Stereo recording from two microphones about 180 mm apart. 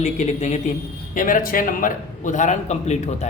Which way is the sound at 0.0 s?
40° left (ahead or behind).